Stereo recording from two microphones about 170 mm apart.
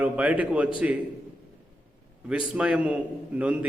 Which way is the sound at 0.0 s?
10° right (ahead or behind).